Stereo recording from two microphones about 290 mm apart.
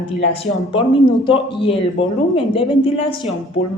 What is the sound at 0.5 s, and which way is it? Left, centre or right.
Speech, centre.